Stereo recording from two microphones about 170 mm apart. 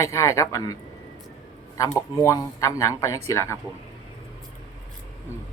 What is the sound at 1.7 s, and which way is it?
Speech, 20° left (ahead or behind).